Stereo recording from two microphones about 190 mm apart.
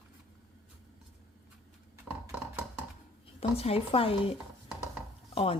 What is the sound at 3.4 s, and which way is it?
Speech, 30° left (ahead or behind).